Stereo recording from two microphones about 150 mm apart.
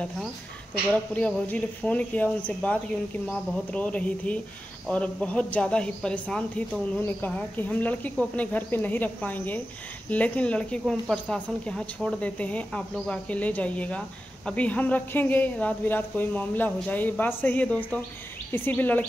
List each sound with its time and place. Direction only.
0.8 s a woman's voice: 10° left (ahead or behind)